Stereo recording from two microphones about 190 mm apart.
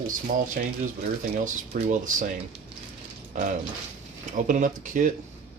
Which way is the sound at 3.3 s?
40° right (ahead or behind).